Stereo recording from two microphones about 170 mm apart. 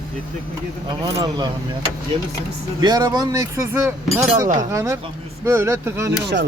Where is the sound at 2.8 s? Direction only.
25° right (ahead or behind).